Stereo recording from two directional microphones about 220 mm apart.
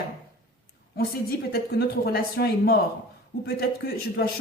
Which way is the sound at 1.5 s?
45° left (ahead or behind).